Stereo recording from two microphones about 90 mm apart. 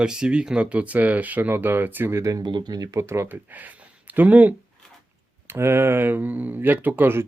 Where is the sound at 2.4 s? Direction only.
50° right (ahead or behind).